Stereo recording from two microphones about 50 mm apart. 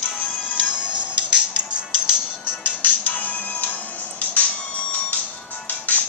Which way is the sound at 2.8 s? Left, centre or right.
Left.